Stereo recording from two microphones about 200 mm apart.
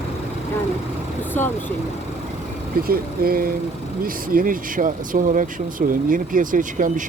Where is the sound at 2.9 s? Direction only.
45° right (ahead or behind).